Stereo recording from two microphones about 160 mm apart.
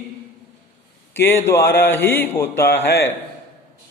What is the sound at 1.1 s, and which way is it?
Speech, 15° left (ahead or behind).